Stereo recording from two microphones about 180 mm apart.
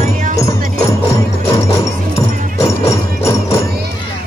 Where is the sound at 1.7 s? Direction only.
15° left (ahead or behind).